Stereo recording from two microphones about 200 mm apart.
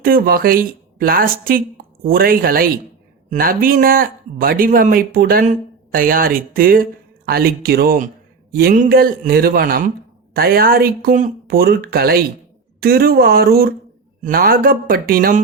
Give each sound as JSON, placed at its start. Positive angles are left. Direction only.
{"t": 0.0, "sound": "speech", "side_deg": -45}